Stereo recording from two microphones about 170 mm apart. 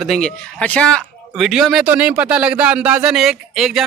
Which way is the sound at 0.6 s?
5° left (ahead or behind).